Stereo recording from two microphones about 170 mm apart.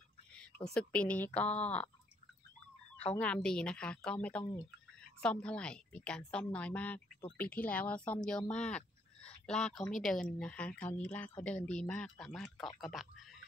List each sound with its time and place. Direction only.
0.7 s a woman's voice: 5° left (ahead or behind)
3.1 s a woman's voice: 5° left (ahead or behind)